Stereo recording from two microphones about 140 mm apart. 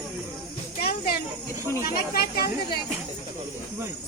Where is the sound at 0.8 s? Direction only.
90° left.